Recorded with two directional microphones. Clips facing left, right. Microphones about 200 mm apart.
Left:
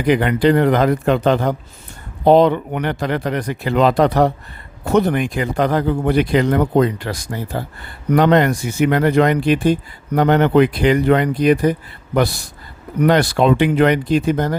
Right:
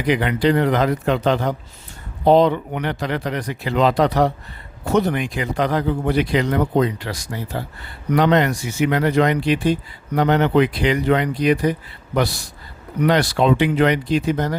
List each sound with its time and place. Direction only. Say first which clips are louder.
0.0 s speech: left 4 dB; 50° left (ahead or behind)